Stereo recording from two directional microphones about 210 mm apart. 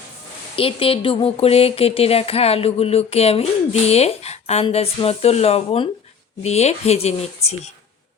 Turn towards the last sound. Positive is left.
turn(degrees=30)  # may be behind; listen again after turning